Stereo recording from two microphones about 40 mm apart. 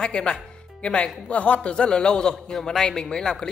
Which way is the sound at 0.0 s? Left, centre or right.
Left.